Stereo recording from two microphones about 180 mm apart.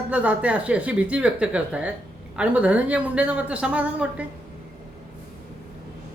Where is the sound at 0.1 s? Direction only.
10° right (ahead or behind).